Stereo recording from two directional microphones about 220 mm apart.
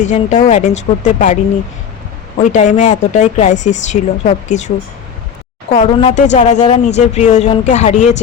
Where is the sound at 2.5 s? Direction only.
35° left (ahead or behind).